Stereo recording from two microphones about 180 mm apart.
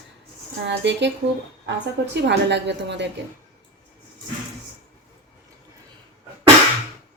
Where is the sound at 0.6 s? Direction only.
75° right (ahead or behind).